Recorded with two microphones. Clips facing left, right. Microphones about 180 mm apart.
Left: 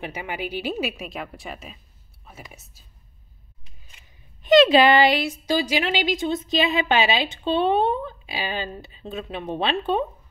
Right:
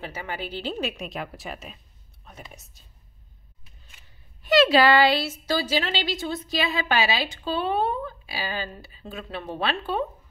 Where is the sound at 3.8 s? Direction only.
20° left (ahead or behind).